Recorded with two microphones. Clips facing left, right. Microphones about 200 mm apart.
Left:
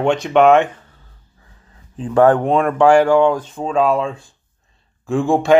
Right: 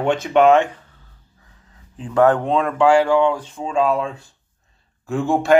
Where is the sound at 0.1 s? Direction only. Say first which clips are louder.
Left 1 dB; 55° left (ahead or behind).